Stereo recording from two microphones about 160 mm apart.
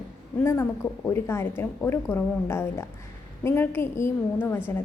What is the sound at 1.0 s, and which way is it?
A woman's voice, 15° left (ahead or behind).